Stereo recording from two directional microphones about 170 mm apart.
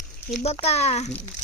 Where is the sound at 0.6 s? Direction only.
40° left (ahead or behind).